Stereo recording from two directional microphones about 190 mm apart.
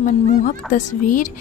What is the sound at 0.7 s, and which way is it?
Speech, 40° left (ahead or behind).